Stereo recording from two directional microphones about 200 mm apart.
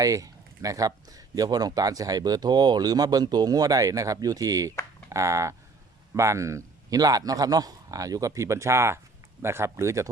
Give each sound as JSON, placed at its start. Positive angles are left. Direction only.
{"t": 0.0, "sound": "a man's voice", "side_deg": -15}